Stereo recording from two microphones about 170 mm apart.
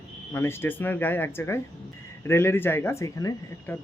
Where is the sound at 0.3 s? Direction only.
15° left (ahead or behind).